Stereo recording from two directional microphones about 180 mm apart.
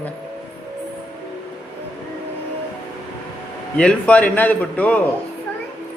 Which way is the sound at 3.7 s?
5° left (ahead or behind).